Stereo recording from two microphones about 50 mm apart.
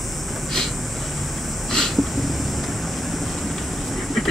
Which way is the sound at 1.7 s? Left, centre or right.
Centre.